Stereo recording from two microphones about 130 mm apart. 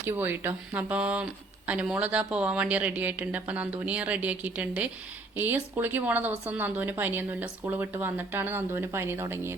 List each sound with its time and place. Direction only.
0.0 s speech: 15° right (ahead or behind)